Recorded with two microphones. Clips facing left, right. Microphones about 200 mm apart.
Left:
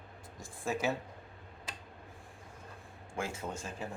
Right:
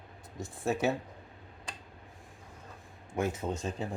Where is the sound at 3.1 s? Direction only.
20° right (ahead or behind).